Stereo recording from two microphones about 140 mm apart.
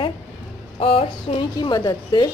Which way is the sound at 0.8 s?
45° left (ahead or behind).